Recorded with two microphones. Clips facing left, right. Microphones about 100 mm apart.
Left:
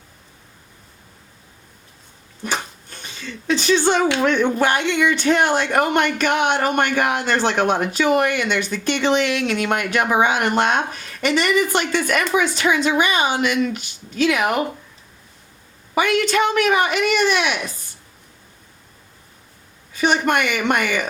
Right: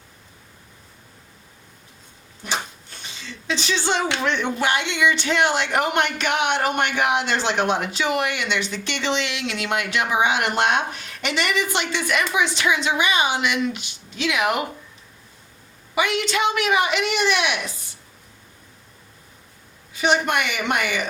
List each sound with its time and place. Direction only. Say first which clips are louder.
2.4 s a sound: left 2 dB; 50° left (ahead or behind)
4.2 s speech: left 5 dB; 50° left (ahead or behind)
16.0 s speech: left 4 dB; 45° left (ahead or behind)
20.0 s speech: left 2 dB; 50° left (ahead or behind)